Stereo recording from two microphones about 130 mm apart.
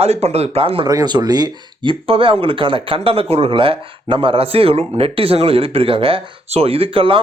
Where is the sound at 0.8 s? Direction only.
30° right (ahead or behind).